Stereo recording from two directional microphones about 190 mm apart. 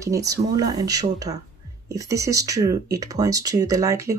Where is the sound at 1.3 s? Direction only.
35° right (ahead or behind).